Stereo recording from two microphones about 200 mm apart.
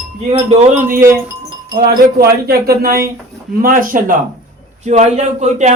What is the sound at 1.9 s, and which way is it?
Speech, 50° right (ahead or behind).